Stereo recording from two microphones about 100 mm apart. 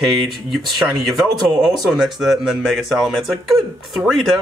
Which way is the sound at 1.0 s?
Centre (ahead or behind).